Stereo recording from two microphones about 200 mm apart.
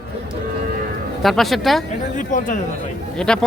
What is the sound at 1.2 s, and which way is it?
Speech, centre (ahead or behind).